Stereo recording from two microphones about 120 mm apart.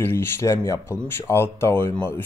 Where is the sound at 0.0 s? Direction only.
20° left (ahead or behind).